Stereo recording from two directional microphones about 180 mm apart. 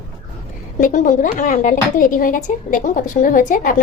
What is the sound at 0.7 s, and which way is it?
Speech, 45° left (ahead or behind).